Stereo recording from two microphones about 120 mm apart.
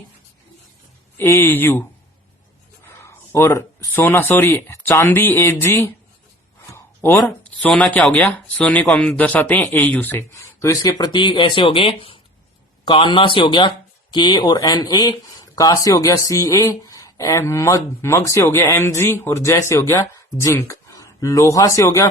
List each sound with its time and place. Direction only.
1.2 s speech: 20° left (ahead or behind)
6.7 s a sound: 20° left (ahead or behind)
7.7 s speech: 10° left (ahead or behind)
10.3 s speech: 25° left (ahead or behind)